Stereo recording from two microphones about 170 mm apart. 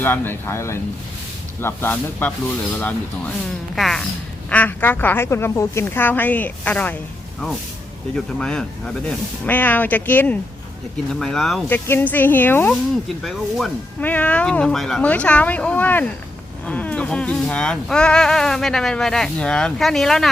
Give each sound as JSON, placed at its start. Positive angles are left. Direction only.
{"t": 0.0, "sound": "a woman's voice", "side_deg": 10}
{"t": 3.8, "sound": "a woman's voice", "side_deg": 0}
{"t": 8.1, "sound": "a woman's voice", "side_deg": 5}
{"t": 14.0, "sound": "a woman's voice", "side_deg": 10}